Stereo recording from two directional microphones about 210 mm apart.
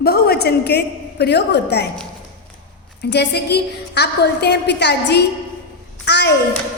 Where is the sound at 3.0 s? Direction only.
50° left (ahead or behind).